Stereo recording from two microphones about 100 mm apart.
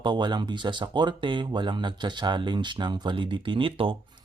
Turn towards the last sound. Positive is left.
turn(degrees=-60)  # may be behind; listen again after turning